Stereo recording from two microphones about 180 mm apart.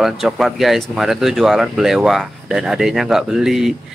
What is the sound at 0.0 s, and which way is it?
Speech, centre (ahead or behind).